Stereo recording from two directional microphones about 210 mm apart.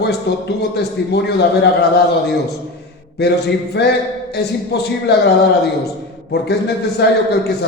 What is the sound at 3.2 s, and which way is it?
Speech, 50° left (ahead or behind).